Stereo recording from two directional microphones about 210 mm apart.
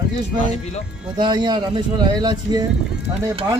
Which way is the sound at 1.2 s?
20° right (ahead or behind).